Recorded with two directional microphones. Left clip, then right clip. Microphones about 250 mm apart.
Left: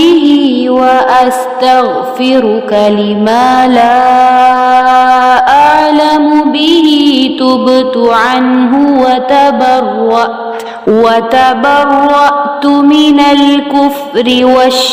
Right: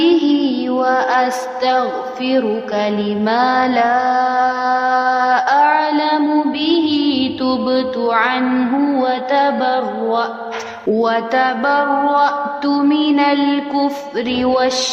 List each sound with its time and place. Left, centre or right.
0.0 s music: left
2.2 s mantra: left